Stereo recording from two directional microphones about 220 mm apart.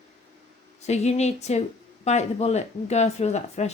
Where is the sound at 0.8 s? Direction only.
30° left (ahead or behind).